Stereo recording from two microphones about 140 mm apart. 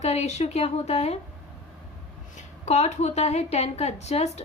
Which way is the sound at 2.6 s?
55° left (ahead or behind).